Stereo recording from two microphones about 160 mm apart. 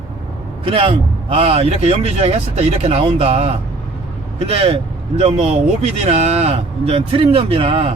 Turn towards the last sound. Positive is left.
turn(degrees=-35)  # may be behind; listen again after turning